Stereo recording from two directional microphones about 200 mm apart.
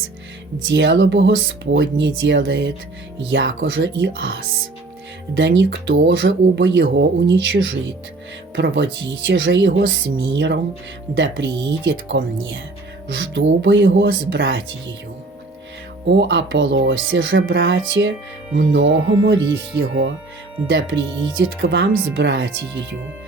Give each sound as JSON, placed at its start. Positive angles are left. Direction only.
{"t": 0.7, "sound": "speech", "side_deg": -65}
{"t": 5.4, "sound": "speech", "side_deg": -65}
{"t": 16.0, "sound": "speech", "side_deg": -65}
{"t": 20.7, "sound": "speech", "side_deg": -65}